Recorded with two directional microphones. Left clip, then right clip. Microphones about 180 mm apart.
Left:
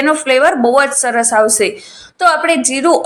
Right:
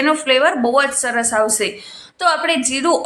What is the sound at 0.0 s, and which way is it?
A woman's voice, 15° left (ahead or behind).